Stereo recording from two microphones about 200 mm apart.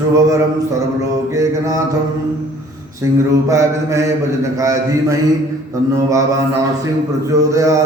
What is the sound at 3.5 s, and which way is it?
Mantra, 15° right (ahead or behind).